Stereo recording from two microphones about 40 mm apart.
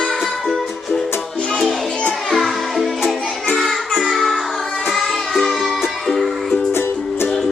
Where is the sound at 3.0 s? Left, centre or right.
Centre.